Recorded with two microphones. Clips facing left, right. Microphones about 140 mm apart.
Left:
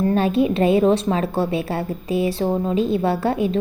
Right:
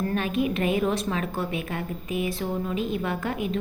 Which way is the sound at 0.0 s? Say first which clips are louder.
Left 8 dB; 30° left (ahead or behind).